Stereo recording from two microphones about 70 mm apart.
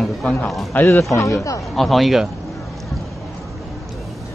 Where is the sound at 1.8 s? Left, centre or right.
Centre.